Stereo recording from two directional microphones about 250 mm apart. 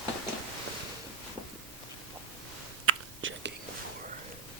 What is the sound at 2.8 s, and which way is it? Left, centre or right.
Whispering, right.